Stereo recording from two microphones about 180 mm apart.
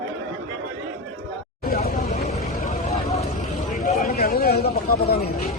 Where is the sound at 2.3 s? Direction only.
40° left (ahead or behind).